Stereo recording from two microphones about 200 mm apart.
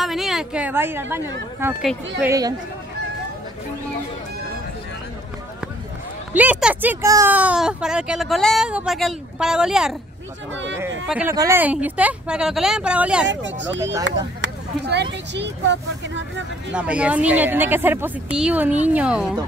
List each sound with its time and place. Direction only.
0.0 s speech: centre (ahead or behind); by 2.5 s 15° right (ahead or behind)
6.3 s speech: 5° right (ahead or behind)
10.5 s speech: 65° right (ahead or behind)
11.1 s speech: 5° right (ahead or behind)
13.3 s speech: 65° right (ahead or behind)
14.4 s a sound: 60° right (ahead or behind)
15.3 s speech: 60° right (ahead or behind)
16.7 s speech: 5° right (ahead or behind)